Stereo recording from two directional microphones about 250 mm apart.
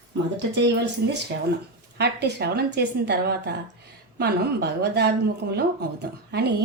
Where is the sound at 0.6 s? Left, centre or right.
Right.